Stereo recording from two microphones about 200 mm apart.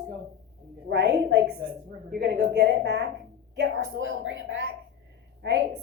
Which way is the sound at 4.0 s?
70° right (ahead or behind).